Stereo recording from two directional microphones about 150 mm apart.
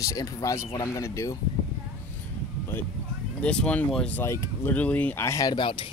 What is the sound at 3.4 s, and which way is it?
Speech, 5° left (ahead or behind).